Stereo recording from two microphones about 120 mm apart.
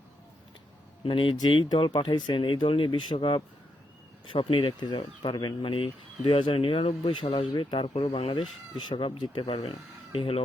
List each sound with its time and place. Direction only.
1.0 s speech: 45° left (ahead or behind)